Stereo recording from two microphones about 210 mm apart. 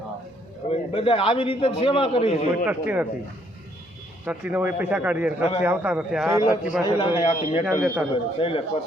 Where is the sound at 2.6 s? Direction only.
10° right (ahead or behind).